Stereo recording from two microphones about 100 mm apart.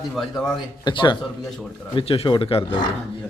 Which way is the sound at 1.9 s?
65° left (ahead or behind).